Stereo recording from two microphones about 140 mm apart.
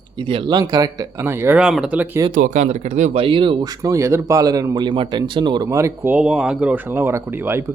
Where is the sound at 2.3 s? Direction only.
70° right (ahead or behind).